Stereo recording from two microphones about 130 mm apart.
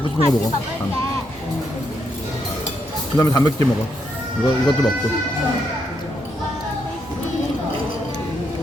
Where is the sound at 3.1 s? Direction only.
25° left (ahead or behind).